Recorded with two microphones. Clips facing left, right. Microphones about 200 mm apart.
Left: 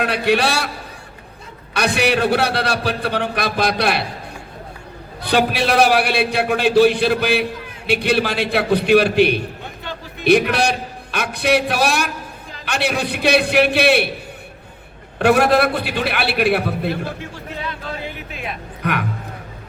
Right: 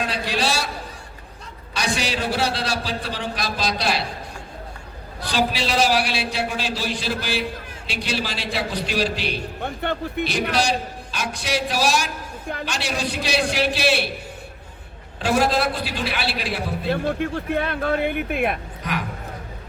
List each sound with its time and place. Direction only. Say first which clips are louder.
0.0 s a man's voice: left 7 dB; 60° left (ahead or behind)
1.7 s a man's voice: left 7 dB; 60° left (ahead or behind)
5.2 s a man's voice: left 5 dB; 60° left (ahead or behind)
9.6 s a man's voice: right 6 dB; 60° right (ahead or behind)
10.2 s a man's voice: left 9 dB; 60° left (ahead or behind)
15.2 s a man's voice: left 6 dB; 60° left (ahead or behind)
16.9 s speech: right 4 dB; 55° right (ahead or behind)
18.8 s speech: left 10 dB; 60° left (ahead or behind)